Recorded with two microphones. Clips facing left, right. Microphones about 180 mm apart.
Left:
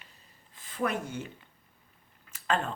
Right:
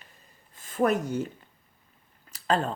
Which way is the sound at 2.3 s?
35° right (ahead or behind).